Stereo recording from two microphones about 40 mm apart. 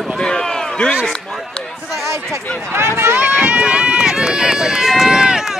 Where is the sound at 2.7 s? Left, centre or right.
Right.